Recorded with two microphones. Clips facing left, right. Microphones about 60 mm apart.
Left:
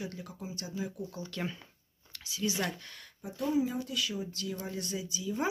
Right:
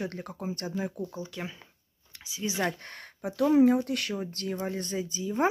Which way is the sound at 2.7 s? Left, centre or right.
Right.